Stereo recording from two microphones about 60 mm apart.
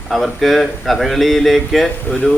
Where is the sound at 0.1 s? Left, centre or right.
Centre.